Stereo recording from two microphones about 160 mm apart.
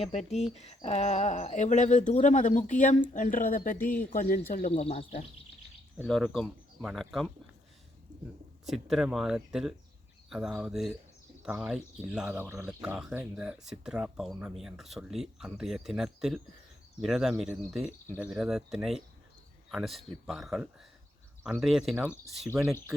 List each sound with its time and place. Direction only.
0.0 s speech: 45° left (ahead or behind); by 4.7 s 60° left (ahead or behind)
4.7 s speech: 40° left (ahead or behind)
6.0 s speech: 5° left (ahead or behind)
8.6 s speech: centre (ahead or behind)